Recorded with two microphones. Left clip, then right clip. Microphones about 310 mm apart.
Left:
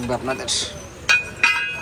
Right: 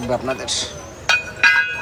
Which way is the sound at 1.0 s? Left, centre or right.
Right.